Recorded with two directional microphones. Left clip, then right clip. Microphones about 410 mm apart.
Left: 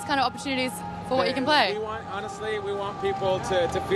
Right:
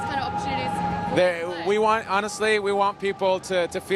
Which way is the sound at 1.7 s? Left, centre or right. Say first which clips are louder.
Right 10 dB; right.